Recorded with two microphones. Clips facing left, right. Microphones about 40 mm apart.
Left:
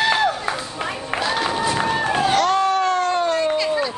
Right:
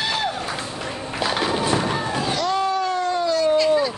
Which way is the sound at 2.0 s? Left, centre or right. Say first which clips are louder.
Left 5 dB; left.